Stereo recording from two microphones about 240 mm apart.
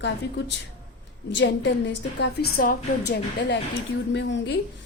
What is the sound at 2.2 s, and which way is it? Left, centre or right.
A woman's voice, left.